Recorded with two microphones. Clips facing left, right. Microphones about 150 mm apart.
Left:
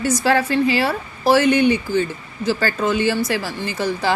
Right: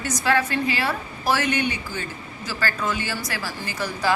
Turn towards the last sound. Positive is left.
turn(degrees=25)  # may be behind; listen again after turning